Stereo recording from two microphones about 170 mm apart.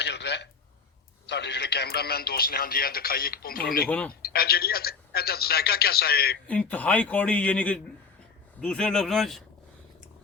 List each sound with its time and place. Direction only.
0.0 s a sound: 90° left
1.3 s speech: 85° left; by 3.8 s 60° left (ahead or behind)
3.8 s a man's voice: 10° left (ahead or behind)
4.1 s speech: 65° left (ahead or behind)
6.5 s a man's voice: 10° left (ahead or behind)